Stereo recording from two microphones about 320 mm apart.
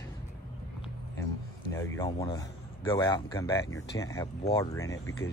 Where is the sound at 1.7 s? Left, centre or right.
Centre.